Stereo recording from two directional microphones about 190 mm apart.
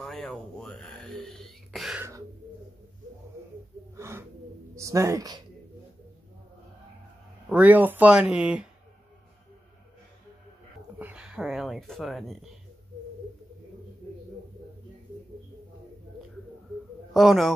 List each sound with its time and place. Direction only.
0.0 s a sound: centre (ahead or behind)
3.9 s gasp: 15° right (ahead or behind)
4.7 s speech: 15° right (ahead or behind)
7.4 s speech: 5° right (ahead or behind)
11.0 s speech: 5° right (ahead or behind)
17.1 s speech: centre (ahead or behind)